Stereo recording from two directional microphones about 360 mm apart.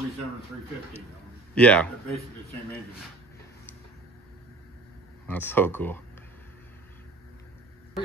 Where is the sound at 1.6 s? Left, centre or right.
Centre.